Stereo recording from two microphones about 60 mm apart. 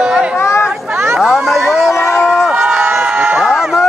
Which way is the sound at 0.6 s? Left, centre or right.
Centre.